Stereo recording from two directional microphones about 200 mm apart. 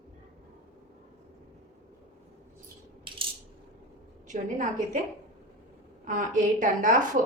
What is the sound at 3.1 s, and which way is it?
Coin, 25° right (ahead or behind).